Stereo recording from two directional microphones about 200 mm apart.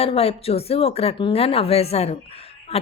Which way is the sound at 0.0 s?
30° left (ahead or behind).